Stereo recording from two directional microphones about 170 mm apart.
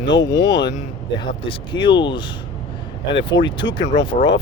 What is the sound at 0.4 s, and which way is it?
Speech, 90° left.